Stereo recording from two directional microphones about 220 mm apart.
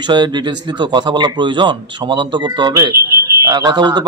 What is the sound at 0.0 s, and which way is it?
Speech, 20° right (ahead or behind).